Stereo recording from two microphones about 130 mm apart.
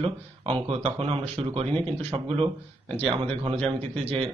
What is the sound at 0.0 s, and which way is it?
Speech, 45° right (ahead or behind).